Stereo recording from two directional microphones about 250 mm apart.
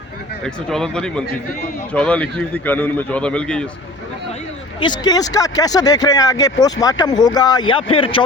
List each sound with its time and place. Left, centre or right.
0.4 s a man's voice: centre
4.8 s speech: centre